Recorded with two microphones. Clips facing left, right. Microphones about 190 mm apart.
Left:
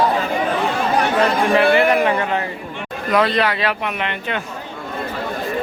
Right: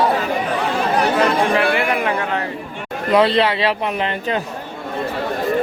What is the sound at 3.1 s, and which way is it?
Speech, 30° right (ahead or behind).